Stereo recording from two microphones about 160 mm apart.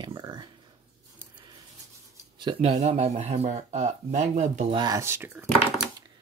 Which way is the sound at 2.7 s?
40° right (ahead or behind).